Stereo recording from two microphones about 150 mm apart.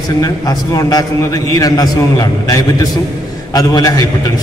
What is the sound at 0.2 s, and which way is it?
A man's voice, 25° left (ahead or behind).